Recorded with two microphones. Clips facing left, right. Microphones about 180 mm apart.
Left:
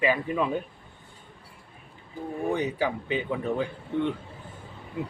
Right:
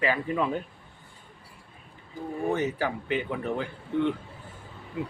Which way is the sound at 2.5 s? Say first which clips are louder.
Left 1 dB; 15° left (ahead or behind).